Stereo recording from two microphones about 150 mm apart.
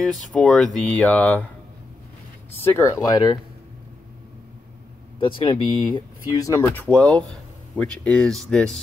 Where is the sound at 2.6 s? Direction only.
15° left (ahead or behind).